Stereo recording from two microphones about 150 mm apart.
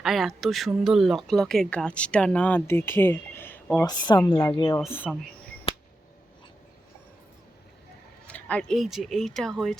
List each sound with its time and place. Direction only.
0.0 s speech: centre (ahead or behind)
4.4 s speech: 25° left (ahead or behind)
4.9 s speech: 10° left (ahead or behind)
8.3 s speech: 10° left (ahead or behind)